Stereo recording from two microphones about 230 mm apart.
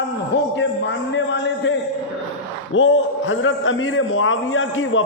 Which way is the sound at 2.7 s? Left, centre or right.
Left.